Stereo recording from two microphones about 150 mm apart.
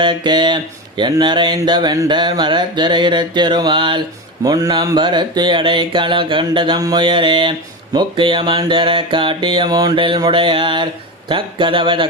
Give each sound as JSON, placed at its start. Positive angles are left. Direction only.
{"t": 0.0, "sound": "speech", "side_deg": -30}